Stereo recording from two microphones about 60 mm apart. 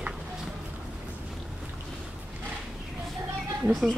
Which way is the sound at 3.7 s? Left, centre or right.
Centre.